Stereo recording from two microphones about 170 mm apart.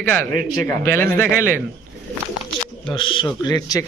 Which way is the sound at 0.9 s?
15° left (ahead or behind).